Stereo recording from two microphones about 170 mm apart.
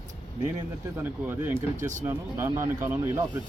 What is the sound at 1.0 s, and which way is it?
Speech, 10° right (ahead or behind).